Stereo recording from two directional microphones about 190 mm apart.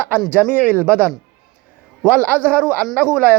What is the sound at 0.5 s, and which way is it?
Speech, 10° right (ahead or behind).